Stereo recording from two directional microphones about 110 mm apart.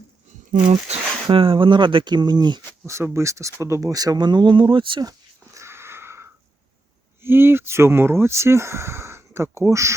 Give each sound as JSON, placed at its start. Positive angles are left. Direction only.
{"t": 0.9, "sound": "a sound", "side_deg": -80}
{"t": 1.3, "sound": "speech", "side_deg": -50}
{"t": 2.8, "sound": "speech", "side_deg": -25}
{"t": 5.5, "sound": "wheeze", "side_deg": -25}
{"t": 7.2, "sound": "speech", "side_deg": -20}